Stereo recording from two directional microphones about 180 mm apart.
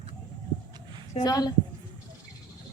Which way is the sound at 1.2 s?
20° left (ahead or behind).